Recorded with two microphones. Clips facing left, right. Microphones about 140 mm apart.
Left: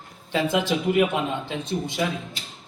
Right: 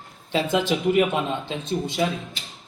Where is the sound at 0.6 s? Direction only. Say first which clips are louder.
Right 1 dB; 15° right (ahead or behind).